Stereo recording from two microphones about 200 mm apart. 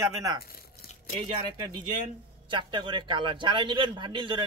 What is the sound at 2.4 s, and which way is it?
A man's voice, 25° right (ahead or behind).